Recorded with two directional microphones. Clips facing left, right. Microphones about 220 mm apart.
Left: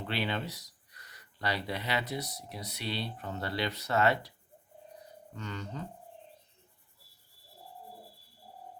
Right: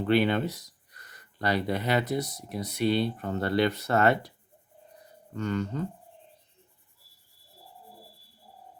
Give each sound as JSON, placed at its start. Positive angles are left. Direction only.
{"t": 0.0, "sound": "speech", "side_deg": -50}
{"t": 5.3, "sound": "speech", "side_deg": -50}